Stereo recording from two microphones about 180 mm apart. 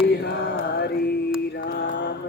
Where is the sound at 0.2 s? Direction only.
70° left (ahead or behind).